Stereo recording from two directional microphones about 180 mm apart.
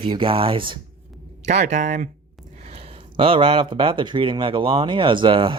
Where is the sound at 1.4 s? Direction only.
40° right (ahead or behind).